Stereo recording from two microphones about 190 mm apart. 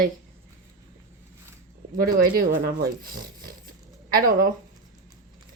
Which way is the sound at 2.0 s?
50° right (ahead or behind).